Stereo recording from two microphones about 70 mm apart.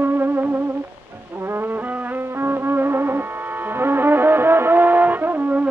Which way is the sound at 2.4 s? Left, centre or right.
Right.